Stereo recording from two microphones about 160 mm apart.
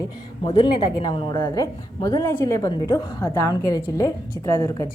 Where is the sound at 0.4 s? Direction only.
30° left (ahead or behind).